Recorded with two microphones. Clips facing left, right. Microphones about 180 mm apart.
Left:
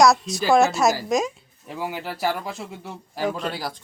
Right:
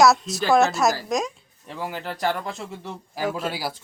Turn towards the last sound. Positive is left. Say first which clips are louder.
# even
turn(degrees=-5)  # may be behind; listen again after turning